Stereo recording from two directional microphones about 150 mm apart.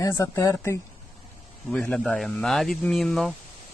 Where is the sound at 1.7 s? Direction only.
5° left (ahead or behind).